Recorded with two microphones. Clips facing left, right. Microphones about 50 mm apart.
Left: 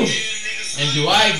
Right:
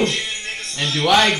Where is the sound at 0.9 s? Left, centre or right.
Centre.